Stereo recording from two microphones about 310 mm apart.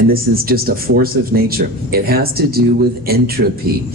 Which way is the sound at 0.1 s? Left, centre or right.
Right.